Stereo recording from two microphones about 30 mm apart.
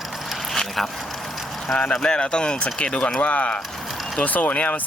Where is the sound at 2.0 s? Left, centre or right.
Left.